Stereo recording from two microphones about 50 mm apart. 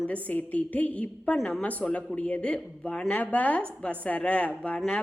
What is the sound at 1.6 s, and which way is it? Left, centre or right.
A woman's voice, left.